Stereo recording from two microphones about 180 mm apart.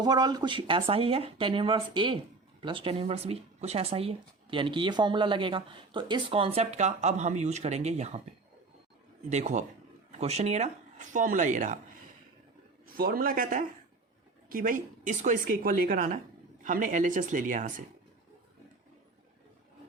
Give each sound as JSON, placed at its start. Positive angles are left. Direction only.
{"t": 0.0, "sound": "speech", "side_deg": -20}
{"t": 9.3, "sound": "speech", "side_deg": -40}
{"t": 12.9, "sound": "speech", "side_deg": -55}